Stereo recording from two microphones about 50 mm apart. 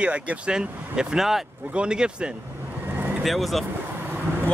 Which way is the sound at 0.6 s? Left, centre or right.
Centre.